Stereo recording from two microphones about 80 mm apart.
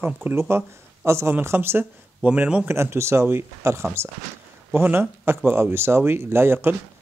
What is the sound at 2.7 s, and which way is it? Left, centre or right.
Speech, right.